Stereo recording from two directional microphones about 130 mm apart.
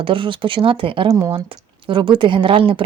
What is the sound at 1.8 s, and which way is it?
Speech, 40° right (ahead or behind).